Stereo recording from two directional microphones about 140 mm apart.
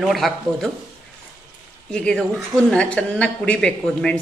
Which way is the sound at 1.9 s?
5° left (ahead or behind).